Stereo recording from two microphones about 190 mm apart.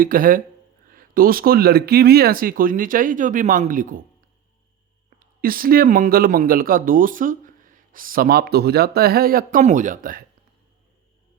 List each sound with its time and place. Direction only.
0.0 s speech: 50° right (ahead or behind)
5.4 s speech: 50° right (ahead or behind)